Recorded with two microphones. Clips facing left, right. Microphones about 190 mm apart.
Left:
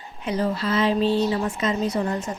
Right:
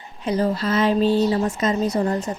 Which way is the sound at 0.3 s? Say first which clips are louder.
Right 3 dB; 40° right (ahead or behind).